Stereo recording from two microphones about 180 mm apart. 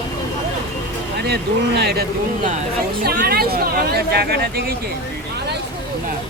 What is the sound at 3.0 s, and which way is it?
Speech, 60° right (ahead or behind).